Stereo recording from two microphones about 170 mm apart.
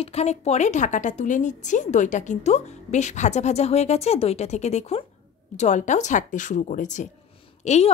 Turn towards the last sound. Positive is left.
turn(degrees=40)  # may be behind; listen again after turning